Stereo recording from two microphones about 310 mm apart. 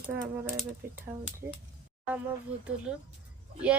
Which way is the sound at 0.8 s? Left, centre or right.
Right.